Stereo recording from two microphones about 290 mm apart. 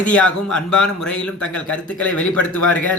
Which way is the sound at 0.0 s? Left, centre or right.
Centre.